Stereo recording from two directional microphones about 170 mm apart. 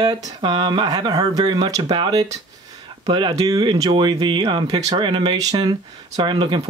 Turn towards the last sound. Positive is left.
turn(degrees=-30)  # may be behind; listen again after turning